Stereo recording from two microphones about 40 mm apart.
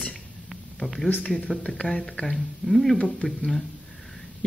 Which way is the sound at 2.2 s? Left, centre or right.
Centre.